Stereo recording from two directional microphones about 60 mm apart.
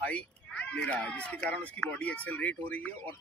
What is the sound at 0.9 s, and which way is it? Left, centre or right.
Speech, centre.